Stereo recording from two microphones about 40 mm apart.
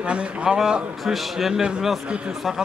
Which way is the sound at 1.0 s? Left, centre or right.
Centre.